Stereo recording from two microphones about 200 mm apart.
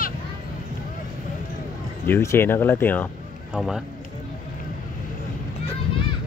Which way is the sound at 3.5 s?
Centre (ahead or behind).